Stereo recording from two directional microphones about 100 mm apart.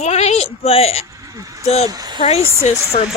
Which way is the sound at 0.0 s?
90° left.